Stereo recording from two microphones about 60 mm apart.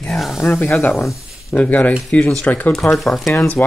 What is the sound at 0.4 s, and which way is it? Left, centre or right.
Speech, left.